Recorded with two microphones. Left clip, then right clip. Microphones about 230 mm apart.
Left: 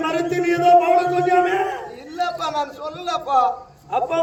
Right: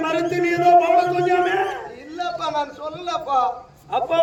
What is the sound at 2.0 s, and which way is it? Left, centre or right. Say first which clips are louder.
A man's voice: left 2 dB; left.